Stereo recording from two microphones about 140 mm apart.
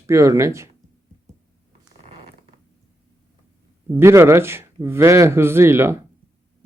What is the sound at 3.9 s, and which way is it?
Speech, 20° right (ahead or behind).